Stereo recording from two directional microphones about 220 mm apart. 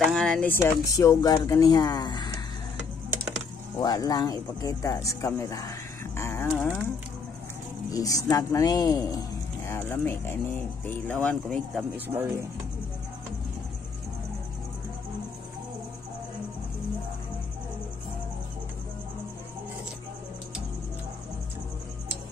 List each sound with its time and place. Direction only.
0.0 s speech: centre (ahead or behind); by 2.3 s 20° left (ahead or behind)
3.8 s speech: 15° left (ahead or behind)
6.1 s a sound: 10° left (ahead or behind)
7.9 s speech: 15° left (ahead or behind)
12.1 s speech: 10° right (ahead or behind)